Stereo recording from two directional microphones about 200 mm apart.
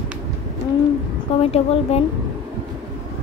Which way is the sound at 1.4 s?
30° left (ahead or behind).